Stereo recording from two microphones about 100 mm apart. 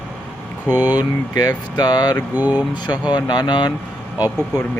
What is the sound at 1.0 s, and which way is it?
Speech, 40° left (ahead or behind).